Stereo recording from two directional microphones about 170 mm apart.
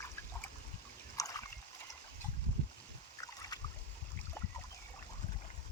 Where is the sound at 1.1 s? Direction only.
20° left (ahead or behind).